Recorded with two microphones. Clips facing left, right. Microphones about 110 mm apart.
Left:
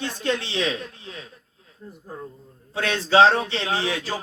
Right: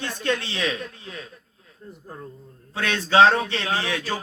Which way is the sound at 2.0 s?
10° left (ahead or behind).